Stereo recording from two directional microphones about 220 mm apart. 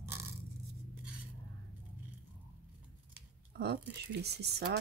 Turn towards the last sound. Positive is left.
turn(degrees=-50)  # may be behind; listen again after turning